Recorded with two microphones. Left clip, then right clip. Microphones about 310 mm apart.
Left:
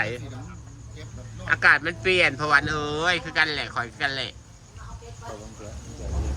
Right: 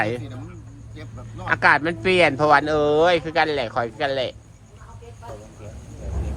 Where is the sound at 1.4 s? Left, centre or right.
Centre.